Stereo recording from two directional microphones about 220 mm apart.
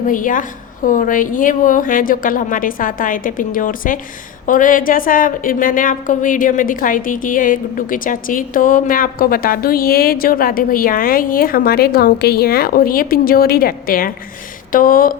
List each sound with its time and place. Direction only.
0.1 s a woman's voice: 40° left (ahead or behind)